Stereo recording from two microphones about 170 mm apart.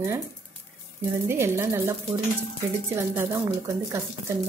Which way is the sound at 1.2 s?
15° right (ahead or behind).